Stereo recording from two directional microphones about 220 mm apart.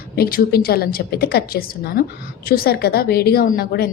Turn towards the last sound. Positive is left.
turn(degrees=45)  # may be behind; listen again after turning